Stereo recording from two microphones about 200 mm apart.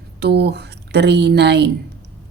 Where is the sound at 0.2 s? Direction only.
55° right (ahead or behind).